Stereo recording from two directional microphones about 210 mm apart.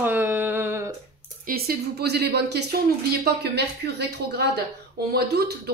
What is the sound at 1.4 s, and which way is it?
Speech, 45° right (ahead or behind).